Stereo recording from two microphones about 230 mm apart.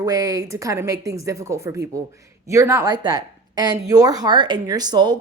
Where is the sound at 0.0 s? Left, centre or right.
Centre.